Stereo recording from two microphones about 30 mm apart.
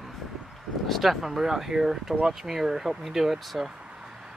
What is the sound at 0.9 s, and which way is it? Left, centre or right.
Speech, centre.